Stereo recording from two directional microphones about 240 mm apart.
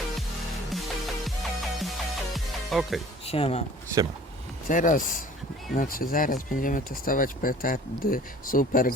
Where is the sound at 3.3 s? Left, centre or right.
Left.